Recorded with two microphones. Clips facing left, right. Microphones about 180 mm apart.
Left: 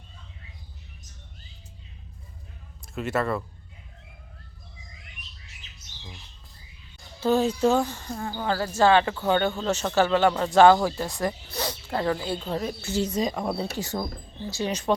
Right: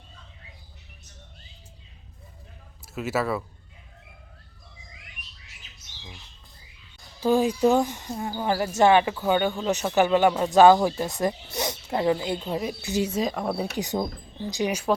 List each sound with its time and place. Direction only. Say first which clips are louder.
2.8 s speech: even; 5° right (ahead or behind)
7.2 s speech: right 1 dB; 10° right (ahead or behind)
13.7 s speech: right 3 dB; 20° right (ahead or behind)